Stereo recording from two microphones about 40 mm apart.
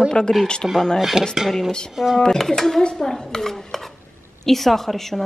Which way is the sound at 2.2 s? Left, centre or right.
Centre.